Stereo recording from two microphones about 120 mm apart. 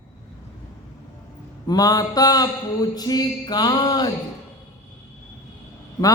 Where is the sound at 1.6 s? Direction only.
30° left (ahead or behind).